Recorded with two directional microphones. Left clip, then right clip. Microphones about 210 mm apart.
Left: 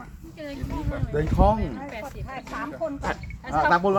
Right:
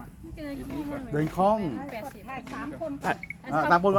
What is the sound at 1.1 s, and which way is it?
Speech, 40° right (ahead or behind).